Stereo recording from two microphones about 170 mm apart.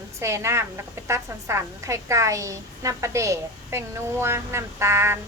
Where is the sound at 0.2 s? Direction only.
15° right (ahead or behind).